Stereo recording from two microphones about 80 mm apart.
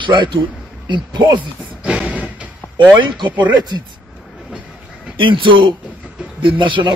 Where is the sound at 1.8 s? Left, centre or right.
Centre.